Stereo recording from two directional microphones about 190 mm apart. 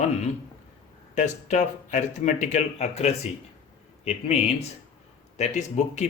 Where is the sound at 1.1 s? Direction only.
40° left (ahead or behind).